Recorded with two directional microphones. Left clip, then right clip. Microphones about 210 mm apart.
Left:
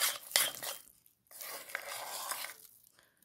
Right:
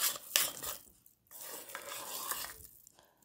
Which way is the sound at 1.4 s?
15° left (ahead or behind).